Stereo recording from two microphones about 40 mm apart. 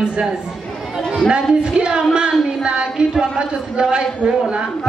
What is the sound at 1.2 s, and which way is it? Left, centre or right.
A man's voice, right.